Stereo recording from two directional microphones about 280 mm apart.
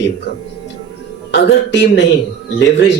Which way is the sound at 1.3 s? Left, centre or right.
Left.